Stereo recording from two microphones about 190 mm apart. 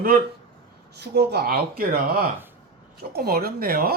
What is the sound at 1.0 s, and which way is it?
Speech, 60° right (ahead or behind).